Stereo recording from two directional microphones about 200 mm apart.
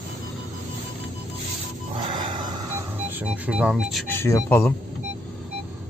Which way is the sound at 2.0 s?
25° right (ahead or behind).